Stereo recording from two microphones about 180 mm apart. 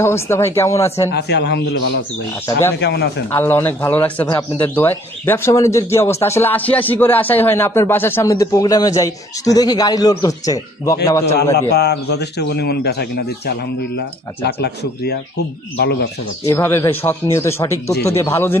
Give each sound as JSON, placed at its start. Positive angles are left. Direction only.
{"t": 0.0, "sound": "speech", "side_deg": 15}
{"t": 1.1, "sound": "a man's voice", "side_deg": 70}
{"t": 2.8, "sound": "a man's voice", "side_deg": 70}
{"t": 3.3, "sound": "a man's voice", "side_deg": 10}
{"t": 11.5, "sound": "a man's voice", "side_deg": 65}
{"t": 16.4, "sound": "speech", "side_deg": 15}